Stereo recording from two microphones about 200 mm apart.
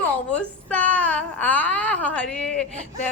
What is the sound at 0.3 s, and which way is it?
Baby cry, 5° left (ahead or behind).